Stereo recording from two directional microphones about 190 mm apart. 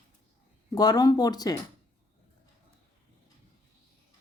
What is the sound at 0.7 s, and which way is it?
Speech, 20° left (ahead or behind).